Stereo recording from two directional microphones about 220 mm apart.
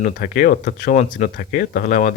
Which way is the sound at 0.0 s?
40° left (ahead or behind).